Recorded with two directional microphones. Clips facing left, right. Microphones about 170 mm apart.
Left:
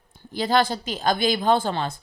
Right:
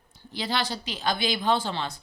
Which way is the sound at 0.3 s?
50° left (ahead or behind).